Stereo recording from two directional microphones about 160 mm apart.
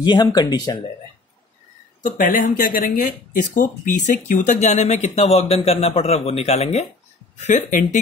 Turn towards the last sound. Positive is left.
turn(degrees=50)  # may be behind; listen again after turning